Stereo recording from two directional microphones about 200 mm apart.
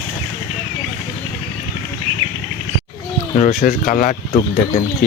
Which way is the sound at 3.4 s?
40° left (ahead or behind).